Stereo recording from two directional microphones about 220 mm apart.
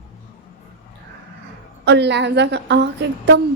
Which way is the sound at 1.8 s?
50° right (ahead or behind).